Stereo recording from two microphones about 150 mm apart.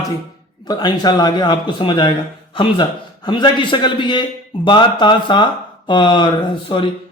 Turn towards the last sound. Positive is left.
turn(degrees=35)  # may be behind; listen again after turning